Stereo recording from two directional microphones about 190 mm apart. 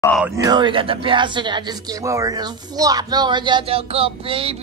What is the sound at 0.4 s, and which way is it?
Speech, 20° right (ahead or behind).